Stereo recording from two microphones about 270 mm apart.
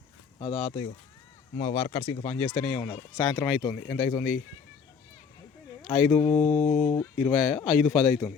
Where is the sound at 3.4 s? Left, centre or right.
Centre.